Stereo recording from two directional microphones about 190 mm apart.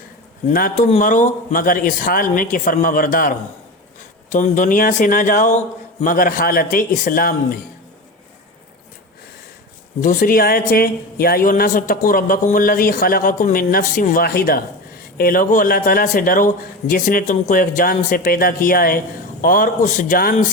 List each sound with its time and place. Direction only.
0.5 s speech: 50° left (ahead or behind)
10.0 s speech: 45° left (ahead or behind)